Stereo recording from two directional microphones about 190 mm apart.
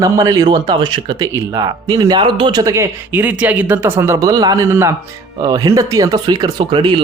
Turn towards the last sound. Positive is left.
turn(degrees=-25)  # may be behind; listen again after turning